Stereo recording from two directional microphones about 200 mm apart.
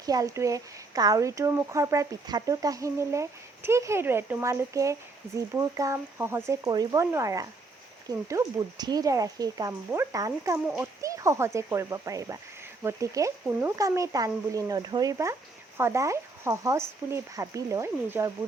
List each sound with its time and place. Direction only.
0.0 s speech: 15° right (ahead or behind)